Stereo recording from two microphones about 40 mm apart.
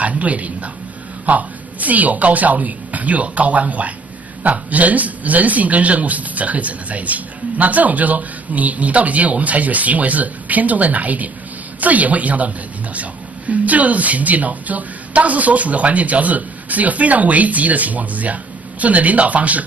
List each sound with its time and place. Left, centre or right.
0.0 s a woman's voice: right